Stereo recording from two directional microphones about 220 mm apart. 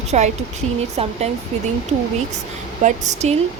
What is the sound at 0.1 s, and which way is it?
Speech, 30° right (ahead or behind).